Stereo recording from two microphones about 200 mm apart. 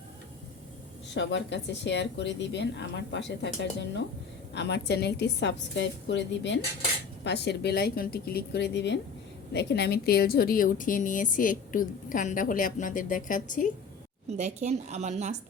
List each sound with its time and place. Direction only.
1.1 s a woman's voice: 60° left (ahead or behind); by 13.7 s 40° left (ahead or behind)
14.3 s a woman's voice: 35° right (ahead or behind)